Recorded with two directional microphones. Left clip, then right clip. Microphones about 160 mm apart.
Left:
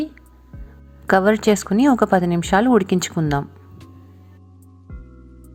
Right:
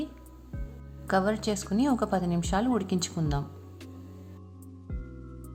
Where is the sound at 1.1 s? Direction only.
40° left (ahead or behind).